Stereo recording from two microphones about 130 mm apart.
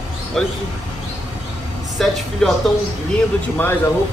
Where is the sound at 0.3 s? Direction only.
Centre (ahead or behind).